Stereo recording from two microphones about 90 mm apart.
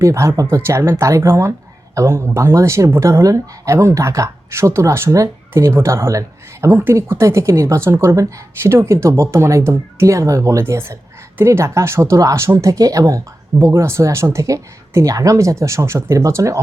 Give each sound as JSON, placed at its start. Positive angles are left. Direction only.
{"t": 0.0, "sound": "speech", "side_deg": -35}